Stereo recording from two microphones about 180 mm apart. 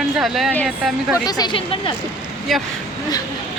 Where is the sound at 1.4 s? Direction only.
30° left (ahead or behind).